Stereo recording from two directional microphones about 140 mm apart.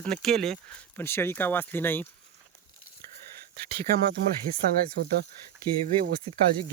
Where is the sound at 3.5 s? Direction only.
90° right.